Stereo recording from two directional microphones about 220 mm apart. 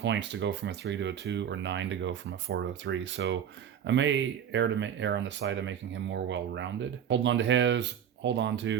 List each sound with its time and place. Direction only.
0.0 s speech: 55° right (ahead or behind)